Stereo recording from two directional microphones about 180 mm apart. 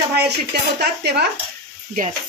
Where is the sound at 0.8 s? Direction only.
65° right (ahead or behind).